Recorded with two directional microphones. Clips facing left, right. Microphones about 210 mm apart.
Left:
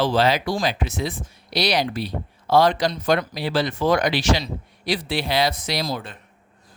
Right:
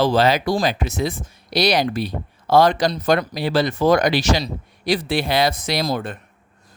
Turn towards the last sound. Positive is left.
turn(degrees=-50)  # may be behind; listen again after turning